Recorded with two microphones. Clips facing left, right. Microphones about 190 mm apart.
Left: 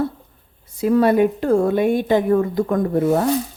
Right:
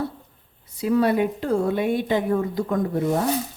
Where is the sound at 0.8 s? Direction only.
50° left (ahead or behind).